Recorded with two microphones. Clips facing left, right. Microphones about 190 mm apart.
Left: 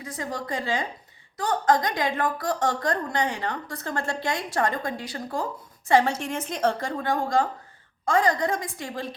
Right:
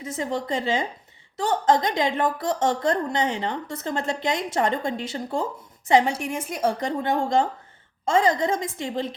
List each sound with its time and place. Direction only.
0.0 s a woman's voice: 25° right (ahead or behind)
6.8 s a woman's voice: 20° right (ahead or behind)